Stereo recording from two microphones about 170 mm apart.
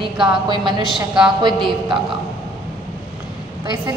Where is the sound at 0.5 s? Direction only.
25° right (ahead or behind).